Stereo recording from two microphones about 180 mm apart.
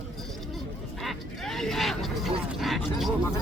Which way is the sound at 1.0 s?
Centre (ahead or behind).